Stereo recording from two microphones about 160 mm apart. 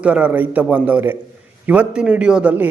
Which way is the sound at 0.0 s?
5° right (ahead or behind).